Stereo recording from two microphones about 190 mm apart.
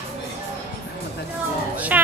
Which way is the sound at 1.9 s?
10° right (ahead or behind).